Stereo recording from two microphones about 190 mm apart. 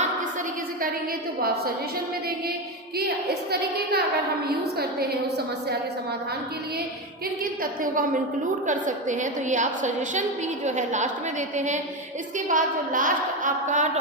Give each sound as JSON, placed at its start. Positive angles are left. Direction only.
{"t": 1.4, "sound": "a woman's voice", "side_deg": -55}
{"t": 3.2, "sound": "a woman's voice", "side_deg": -55}
{"t": 7.6, "sound": "a woman's voice", "side_deg": -45}